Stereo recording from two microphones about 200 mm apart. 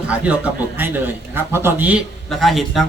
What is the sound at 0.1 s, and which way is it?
A man's voice, 5° right (ahead or behind).